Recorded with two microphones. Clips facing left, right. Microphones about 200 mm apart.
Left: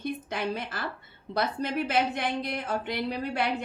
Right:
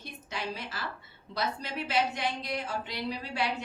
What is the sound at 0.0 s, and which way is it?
Speech, 55° left (ahead or behind).